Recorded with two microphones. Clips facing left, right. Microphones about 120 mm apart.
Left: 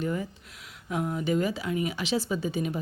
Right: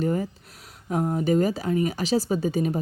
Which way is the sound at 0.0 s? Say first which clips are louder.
Right 5 dB; 40° right (ahead or behind).